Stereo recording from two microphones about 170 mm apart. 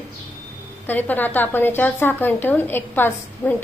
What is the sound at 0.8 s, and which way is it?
A woman's voice, 10° left (ahead or behind).